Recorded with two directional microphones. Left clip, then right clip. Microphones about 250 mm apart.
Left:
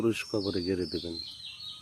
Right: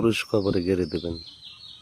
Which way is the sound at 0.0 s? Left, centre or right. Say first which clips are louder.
Right 7 dB; right.